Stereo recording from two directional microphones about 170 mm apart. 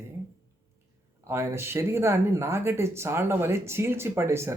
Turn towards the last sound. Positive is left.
turn(degrees=-15)  # may be behind; listen again after turning